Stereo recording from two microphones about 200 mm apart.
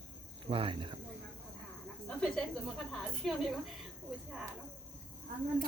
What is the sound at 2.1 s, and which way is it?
Snake, 5° left (ahead or behind).